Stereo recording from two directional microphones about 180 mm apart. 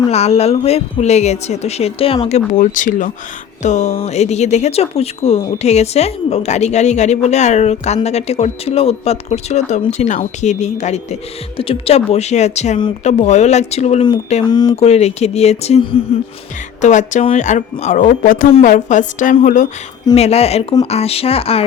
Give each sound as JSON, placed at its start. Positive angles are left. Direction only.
{"t": 0.1, "sound": "a woman's voice", "side_deg": 35}
{"t": 16.8, "sound": "a woman's voice", "side_deg": 45}
{"t": 20.1, "sound": "speech", "side_deg": 35}